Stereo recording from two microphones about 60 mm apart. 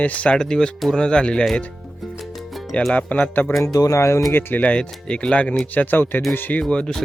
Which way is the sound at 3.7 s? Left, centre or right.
Left.